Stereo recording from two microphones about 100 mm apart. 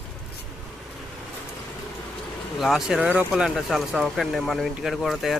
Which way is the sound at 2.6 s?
Centre (ahead or behind).